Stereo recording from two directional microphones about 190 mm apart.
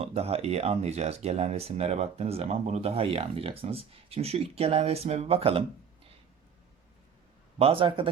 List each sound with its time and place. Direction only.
0.0 s speech: 35° right (ahead or behind)
7.6 s a man's voice: 30° right (ahead or behind)